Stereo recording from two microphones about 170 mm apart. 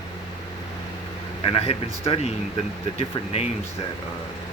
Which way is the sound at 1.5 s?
35° left (ahead or behind).